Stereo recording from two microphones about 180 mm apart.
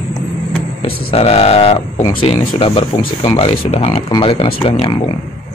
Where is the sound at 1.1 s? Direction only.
35° left (ahead or behind).